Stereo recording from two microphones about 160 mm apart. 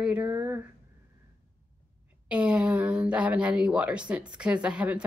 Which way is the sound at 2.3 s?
5° right (ahead or behind).